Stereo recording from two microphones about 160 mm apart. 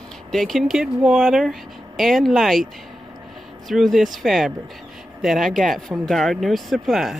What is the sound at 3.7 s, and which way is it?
Speech, centre (ahead or behind).